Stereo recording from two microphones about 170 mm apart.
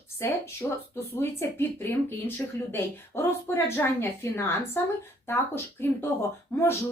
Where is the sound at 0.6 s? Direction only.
10° left (ahead or behind).